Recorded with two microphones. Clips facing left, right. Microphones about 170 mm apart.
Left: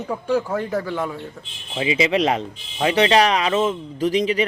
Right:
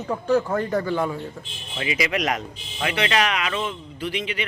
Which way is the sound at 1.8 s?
25° left (ahead or behind).